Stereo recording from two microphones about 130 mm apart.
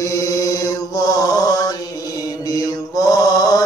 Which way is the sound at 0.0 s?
25° left (ahead or behind).